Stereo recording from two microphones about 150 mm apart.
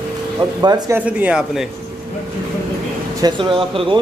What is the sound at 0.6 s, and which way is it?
Speech, 25° right (ahead or behind).